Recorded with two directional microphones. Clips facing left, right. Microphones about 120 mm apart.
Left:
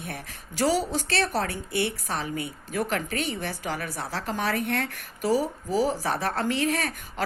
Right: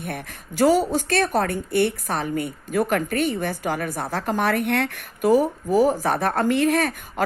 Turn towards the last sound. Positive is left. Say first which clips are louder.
# right 7 dB
turn(degrees=-55)  # may be behind; listen again after turning